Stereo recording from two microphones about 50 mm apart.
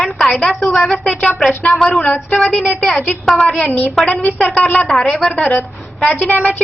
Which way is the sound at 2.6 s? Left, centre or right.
Centre.